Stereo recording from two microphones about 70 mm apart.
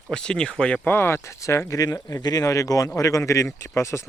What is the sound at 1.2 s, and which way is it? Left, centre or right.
Speech, left.